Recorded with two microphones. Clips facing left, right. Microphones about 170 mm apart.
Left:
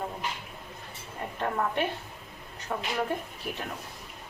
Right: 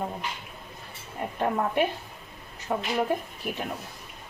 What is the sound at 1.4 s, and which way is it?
A woman's voice, 15° right (ahead or behind).